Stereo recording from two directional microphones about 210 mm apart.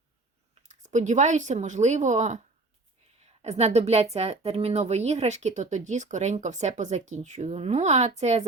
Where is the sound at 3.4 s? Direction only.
30° right (ahead or behind).